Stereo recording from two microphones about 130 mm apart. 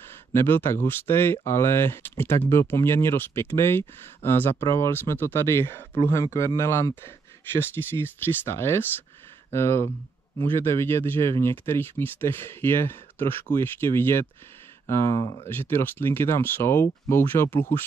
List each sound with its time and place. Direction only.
0.3 s speech: 15° left (ahead or behind)